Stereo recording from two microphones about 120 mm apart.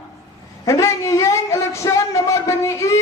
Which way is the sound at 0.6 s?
25° left (ahead or behind).